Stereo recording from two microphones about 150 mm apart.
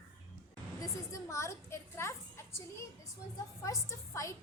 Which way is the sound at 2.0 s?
20° left (ahead or behind).